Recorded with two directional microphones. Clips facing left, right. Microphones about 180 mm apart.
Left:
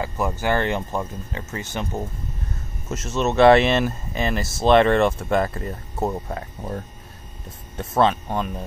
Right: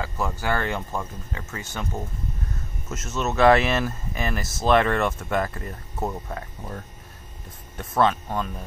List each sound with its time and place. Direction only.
0.0 s speech: 20° left (ahead or behind)
2.9 s speech: 30° left (ahead or behind)
7.7 s speech: 25° left (ahead or behind)